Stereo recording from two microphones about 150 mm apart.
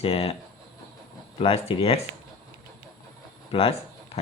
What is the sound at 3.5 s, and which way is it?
Speech, 35° left (ahead or behind).